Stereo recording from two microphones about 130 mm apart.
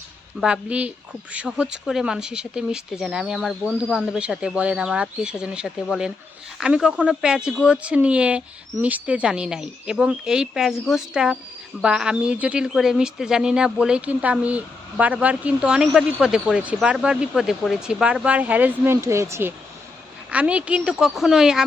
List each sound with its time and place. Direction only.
0.3 s speech: 5° right (ahead or behind)